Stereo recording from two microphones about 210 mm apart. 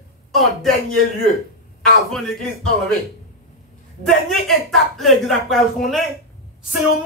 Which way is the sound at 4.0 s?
Centre (ahead or behind).